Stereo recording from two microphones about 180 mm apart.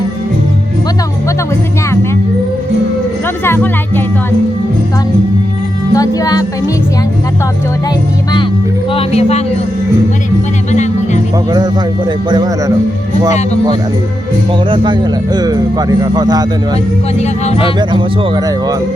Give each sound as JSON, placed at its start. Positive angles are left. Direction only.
{"t": 3.4, "sound": "music", "side_deg": 10}
{"t": 5.9, "sound": "music", "side_deg": 20}
{"t": 8.9, "sound": "music", "side_deg": 35}
{"t": 10.7, "sound": "music", "side_deg": 40}
{"t": 12.3, "sound": "speech", "side_deg": -20}
{"t": 14.7, "sound": "speech", "side_deg": -25}
{"t": 17.2, "sound": "speech", "side_deg": 35}
{"t": 17.7, "sound": "speech", "side_deg": -25}